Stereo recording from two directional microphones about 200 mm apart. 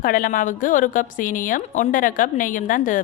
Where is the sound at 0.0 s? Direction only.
45° left (ahead or behind).